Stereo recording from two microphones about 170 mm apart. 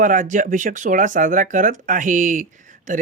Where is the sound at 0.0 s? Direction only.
50° right (ahead or behind).